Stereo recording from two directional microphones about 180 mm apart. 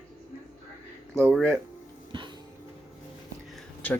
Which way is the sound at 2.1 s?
25° right (ahead or behind).